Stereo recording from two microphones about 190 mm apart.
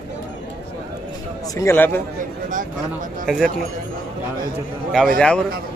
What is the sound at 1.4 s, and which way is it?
Speech, 15° left (ahead or behind).